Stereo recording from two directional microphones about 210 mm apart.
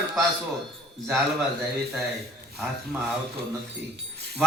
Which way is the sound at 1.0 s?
Centre (ahead or behind).